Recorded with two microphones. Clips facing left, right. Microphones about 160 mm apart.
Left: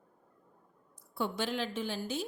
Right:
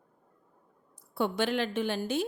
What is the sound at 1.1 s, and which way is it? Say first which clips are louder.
A woman's voice: right 5 dB; 65° right (ahead or behind).